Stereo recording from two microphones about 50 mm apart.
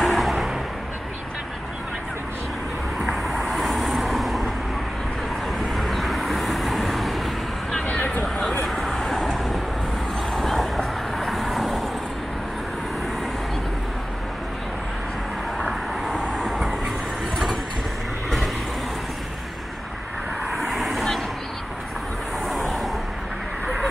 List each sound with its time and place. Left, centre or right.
0.0 s a sound: centre
3.0 s vehicle: centre
5.5 s vehicle: centre
7.8 s vehicle: left
8.6 s vehicle: centre
15.6 s vehicle: centre
20.4 s vehicle: centre
22.5 s vehicle: centre